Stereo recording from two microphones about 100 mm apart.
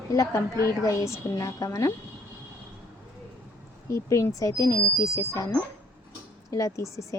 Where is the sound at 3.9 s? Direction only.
30° left (ahead or behind).